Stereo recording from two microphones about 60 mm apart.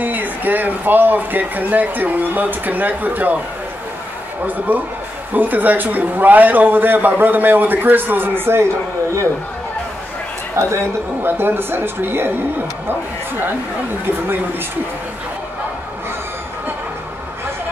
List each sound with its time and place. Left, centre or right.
0.0 s speech: right
4.5 s a man's voice: right
10.5 s a man's voice: right